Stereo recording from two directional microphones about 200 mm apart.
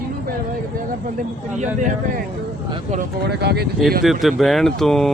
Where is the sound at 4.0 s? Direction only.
Centre (ahead or behind).